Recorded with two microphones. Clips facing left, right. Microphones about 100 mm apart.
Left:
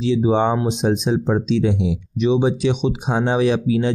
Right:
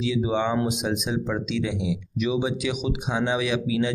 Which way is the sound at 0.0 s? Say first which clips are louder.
Left 7 dB; 35° left (ahead or behind).